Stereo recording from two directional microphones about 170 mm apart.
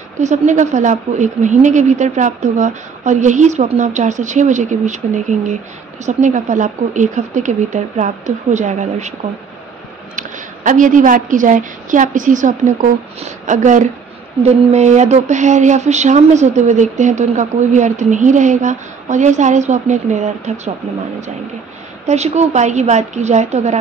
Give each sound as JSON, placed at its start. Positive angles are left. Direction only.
{"t": 0.2, "sound": "speech", "side_deg": -45}
{"t": 10.1, "sound": "speech", "side_deg": -50}
{"t": 22.0, "sound": "speech", "side_deg": -40}